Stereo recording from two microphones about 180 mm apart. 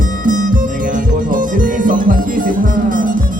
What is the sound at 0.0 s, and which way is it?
Music, 50° right (ahead or behind).